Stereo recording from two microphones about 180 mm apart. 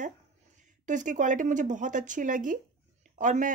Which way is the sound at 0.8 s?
45° right (ahead or behind).